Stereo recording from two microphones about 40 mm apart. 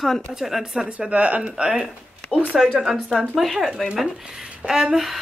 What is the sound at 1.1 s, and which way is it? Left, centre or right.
Speech, right.